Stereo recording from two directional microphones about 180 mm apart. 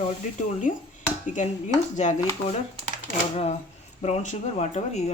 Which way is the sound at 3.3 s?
35° left (ahead or behind).